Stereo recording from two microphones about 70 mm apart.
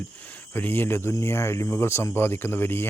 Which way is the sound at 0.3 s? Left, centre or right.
Left.